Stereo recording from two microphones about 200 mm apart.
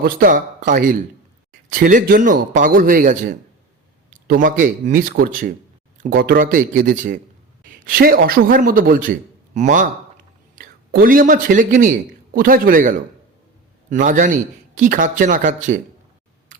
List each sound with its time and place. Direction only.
0.0 s a man's voice: 45° right (ahead or behind)
16.5 s scissors: 40° right (ahead or behind)